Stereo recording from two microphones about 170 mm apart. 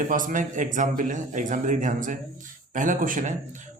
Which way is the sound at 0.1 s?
50° right (ahead or behind).